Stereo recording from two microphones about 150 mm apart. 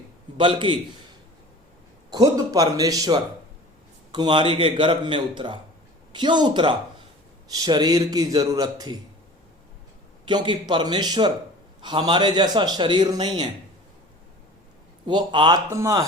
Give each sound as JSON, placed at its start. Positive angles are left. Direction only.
{"t": 0.3, "sound": "speech", "side_deg": -35}
{"t": 2.0, "sound": "a man's voice", "side_deg": -25}
{"t": 10.2, "sound": "a man's voice", "side_deg": -30}
{"t": 15.0, "sound": "speech", "side_deg": -35}
{"t": 15.7, "sound": "a man's voice", "side_deg": -20}